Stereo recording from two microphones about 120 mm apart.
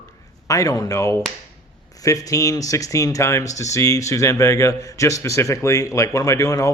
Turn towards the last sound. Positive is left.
turn(degrees=30)  # may be behind; listen again after turning